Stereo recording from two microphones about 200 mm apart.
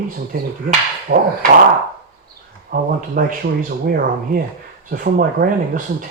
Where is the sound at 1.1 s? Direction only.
50° right (ahead or behind).